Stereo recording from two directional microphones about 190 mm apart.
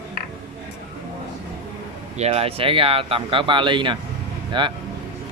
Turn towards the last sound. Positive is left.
turn(degrees=-25)  # may be behind; listen again after turning